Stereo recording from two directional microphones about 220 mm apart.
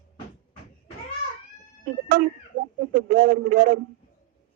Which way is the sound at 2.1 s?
40° right (ahead or behind).